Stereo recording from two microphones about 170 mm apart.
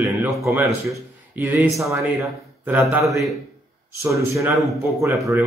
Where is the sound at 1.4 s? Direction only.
15° right (ahead or behind).